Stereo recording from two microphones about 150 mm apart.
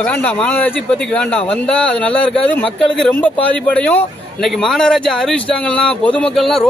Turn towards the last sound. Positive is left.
turn(degrees=0)  # may be behind; listen again after turning